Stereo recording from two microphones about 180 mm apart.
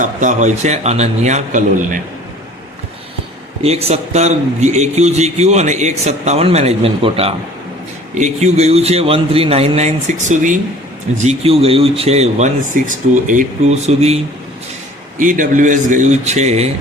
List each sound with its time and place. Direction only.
0.0 s a man's voice: 45° right (ahead or behind)
3.6 s a man's voice: 35° right (ahead or behind)
15.2 s a man's voice: 45° right (ahead or behind)